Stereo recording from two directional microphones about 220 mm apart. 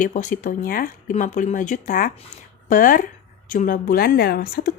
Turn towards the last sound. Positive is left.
turn(degrees=45)  # may be behind; listen again after turning